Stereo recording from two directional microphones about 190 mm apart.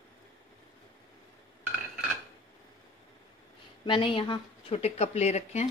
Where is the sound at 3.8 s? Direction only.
25° left (ahead or behind).